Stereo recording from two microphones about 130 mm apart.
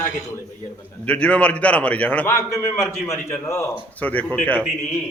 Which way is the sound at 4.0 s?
10° left (ahead or behind).